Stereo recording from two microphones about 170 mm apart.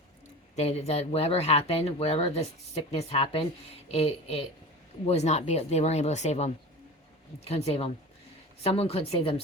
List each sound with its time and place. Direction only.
0.5 s speech: 40° left (ahead or behind)